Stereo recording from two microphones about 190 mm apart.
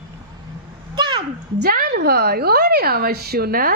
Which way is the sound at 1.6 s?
55° right (ahead or behind).